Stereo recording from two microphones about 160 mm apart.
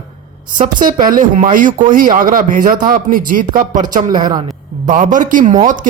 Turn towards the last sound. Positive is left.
turn(degrees=-55)  # may be behind; listen again after turning